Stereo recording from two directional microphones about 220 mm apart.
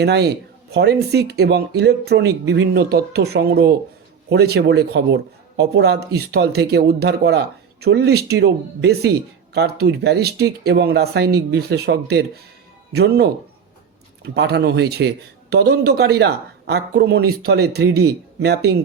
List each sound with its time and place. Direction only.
0.0 s speech: 50° right (ahead or behind)